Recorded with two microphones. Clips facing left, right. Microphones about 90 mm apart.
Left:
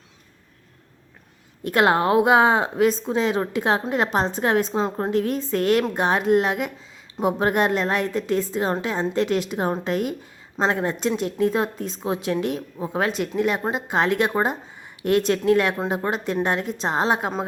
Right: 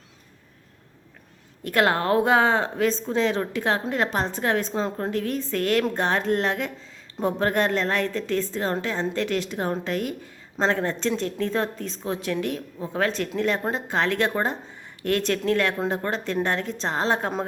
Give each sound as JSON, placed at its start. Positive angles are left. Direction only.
{"t": 1.6, "sound": "a woman's voice", "side_deg": 20}